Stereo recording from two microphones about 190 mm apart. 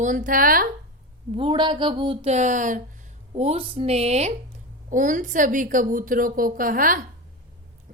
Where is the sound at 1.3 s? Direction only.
25° right (ahead or behind).